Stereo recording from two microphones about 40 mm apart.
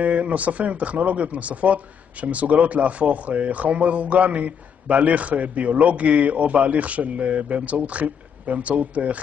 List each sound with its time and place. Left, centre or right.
0.0 s speech: right